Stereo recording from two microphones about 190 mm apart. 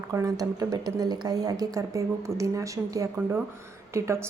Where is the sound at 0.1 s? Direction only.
15° right (ahead or behind).